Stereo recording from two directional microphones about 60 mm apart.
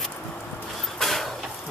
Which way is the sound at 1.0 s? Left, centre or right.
Centre.